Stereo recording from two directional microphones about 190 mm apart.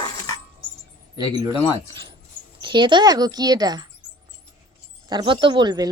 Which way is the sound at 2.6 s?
25° right (ahead or behind).